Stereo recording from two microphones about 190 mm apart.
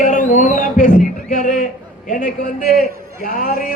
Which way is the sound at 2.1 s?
45° left (ahead or behind).